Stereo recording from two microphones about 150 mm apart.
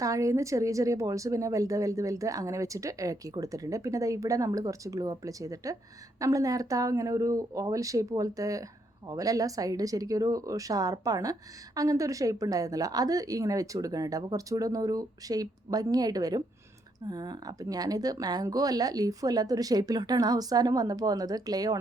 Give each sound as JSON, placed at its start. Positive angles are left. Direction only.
{"t": 0.0, "sound": "speech", "side_deg": -20}